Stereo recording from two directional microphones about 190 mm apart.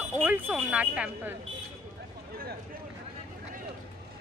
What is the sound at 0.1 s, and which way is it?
Speech, 10° right (ahead or behind).